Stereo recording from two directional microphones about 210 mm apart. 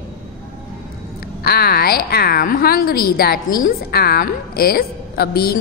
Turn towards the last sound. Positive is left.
turn(degrees=45)  # may be behind; listen again after turning